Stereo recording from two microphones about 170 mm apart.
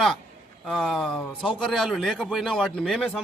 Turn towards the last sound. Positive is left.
turn(degrees=0)  # may be behind; listen again after turning